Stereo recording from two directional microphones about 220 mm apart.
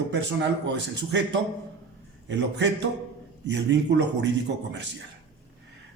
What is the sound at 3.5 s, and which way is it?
Speech, 50° right (ahead or behind).